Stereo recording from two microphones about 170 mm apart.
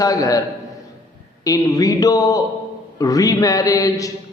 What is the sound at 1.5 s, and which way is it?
Mantra, 20° left (ahead or behind).